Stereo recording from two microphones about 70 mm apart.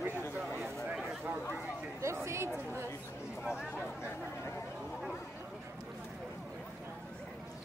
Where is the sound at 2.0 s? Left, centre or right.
Right.